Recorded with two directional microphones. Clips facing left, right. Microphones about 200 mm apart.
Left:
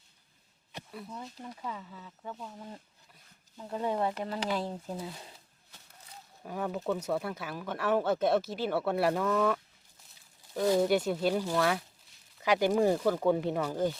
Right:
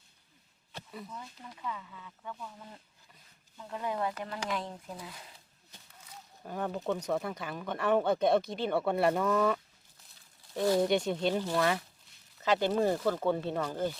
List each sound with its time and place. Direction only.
1.1 s speech: 30° left (ahead or behind)
6.4 s speech: centre (ahead or behind)
10.8 s speech: 5° left (ahead or behind)
12.4 s speech: 10° left (ahead or behind)